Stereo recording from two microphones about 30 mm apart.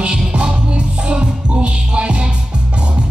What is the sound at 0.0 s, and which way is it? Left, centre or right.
Music, right.